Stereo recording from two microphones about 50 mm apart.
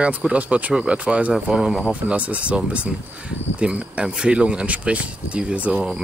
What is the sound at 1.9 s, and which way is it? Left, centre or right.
Speech, right.